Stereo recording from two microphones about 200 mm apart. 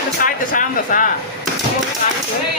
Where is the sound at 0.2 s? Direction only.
45° left (ahead or behind).